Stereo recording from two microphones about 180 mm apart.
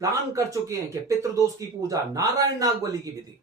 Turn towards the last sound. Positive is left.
turn(degrees=-20)  # may be behind; listen again after turning